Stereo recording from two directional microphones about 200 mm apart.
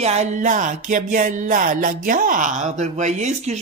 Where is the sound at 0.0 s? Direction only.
35° right (ahead or behind).